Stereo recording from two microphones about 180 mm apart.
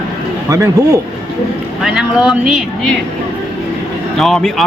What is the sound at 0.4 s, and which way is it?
Speech, 15° right (ahead or behind).